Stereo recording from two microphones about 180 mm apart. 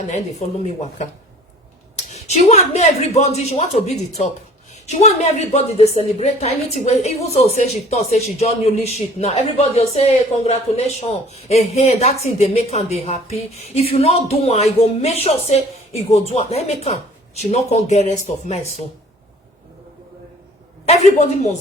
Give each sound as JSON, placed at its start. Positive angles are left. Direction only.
{"t": 0.1, "sound": "a woman's voice", "side_deg": 40}
{"t": 2.1, "sound": "a woman's voice", "side_deg": 35}
{"t": 4.7, "sound": "a woman's voice", "side_deg": 40}
{"t": 20.8, "sound": "a woman's voice", "side_deg": 40}